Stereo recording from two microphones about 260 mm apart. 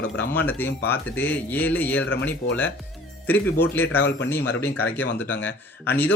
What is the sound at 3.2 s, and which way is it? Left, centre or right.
A man's voice, centre.